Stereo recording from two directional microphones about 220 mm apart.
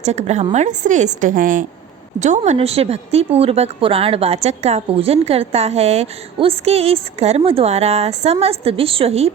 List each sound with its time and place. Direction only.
0.0 s a woman's voice: 30° right (ahead or behind)